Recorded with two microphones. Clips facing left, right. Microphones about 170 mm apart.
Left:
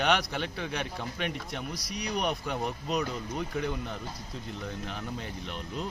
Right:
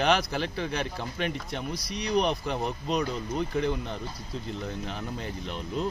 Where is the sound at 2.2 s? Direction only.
30° right (ahead or behind).